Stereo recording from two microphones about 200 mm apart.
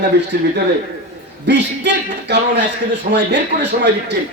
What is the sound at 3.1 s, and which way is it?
Speech, 40° right (ahead or behind).